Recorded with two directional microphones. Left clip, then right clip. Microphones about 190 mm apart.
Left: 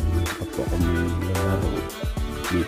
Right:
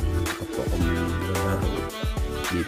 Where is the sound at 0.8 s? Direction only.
Centre (ahead or behind).